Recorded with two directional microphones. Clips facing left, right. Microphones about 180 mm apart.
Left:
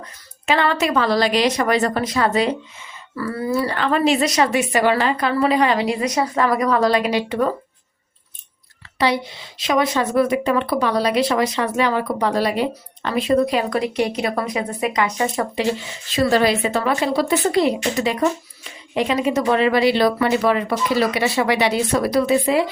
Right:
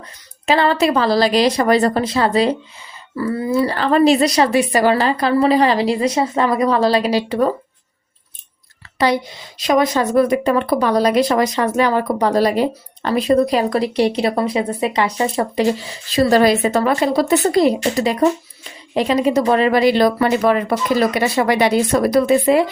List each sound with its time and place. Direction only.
0.0 s a woman's voice: 35° right (ahead or behind)
9.0 s a woman's voice: 45° right (ahead or behind)